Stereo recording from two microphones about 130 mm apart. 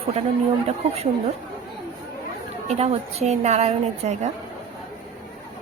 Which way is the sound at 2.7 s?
50° right (ahead or behind).